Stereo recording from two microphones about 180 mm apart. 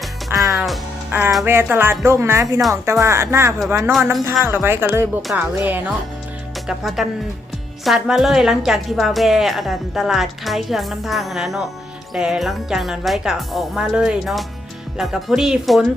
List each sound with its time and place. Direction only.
0.3 s music: 20° right (ahead or behind)
1.1 s a woman's voice: 10° right (ahead or behind)